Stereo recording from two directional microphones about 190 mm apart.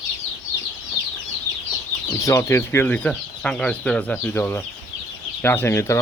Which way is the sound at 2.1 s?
15° left (ahead or behind).